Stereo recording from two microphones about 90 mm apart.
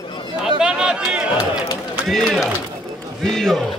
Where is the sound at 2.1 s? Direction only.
Centre (ahead or behind).